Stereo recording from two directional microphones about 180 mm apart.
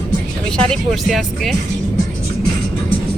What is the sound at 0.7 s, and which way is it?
Speech, centre (ahead or behind).